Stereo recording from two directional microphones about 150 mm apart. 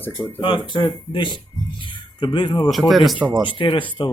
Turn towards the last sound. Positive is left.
turn(degrees=35)  # may be behind; listen again after turning